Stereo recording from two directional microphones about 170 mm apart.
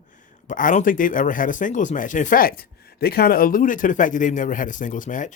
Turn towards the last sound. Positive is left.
turn(degrees=50)  # may be behind; listen again after turning